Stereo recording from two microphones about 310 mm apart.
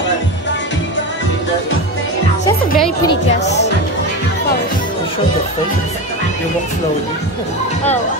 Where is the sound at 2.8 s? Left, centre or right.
Centre.